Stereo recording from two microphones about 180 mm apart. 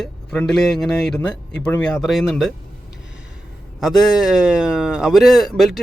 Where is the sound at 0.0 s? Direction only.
5° left (ahead or behind).